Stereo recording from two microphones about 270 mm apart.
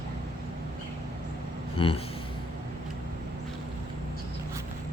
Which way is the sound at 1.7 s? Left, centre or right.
Centre.